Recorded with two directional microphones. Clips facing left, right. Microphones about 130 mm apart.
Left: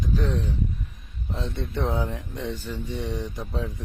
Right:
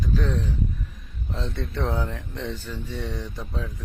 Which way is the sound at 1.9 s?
20° left (ahead or behind).